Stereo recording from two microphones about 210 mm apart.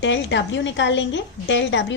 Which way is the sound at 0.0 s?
60° left (ahead or behind).